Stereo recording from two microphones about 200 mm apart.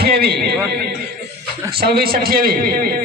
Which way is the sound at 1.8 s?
50° right (ahead or behind).